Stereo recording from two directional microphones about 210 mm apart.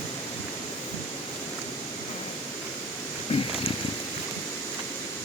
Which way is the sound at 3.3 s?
30° left (ahead or behind).